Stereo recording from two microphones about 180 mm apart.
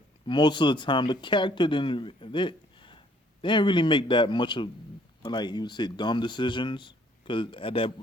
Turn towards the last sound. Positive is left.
turn(degrees=30)  # may be behind; listen again after turning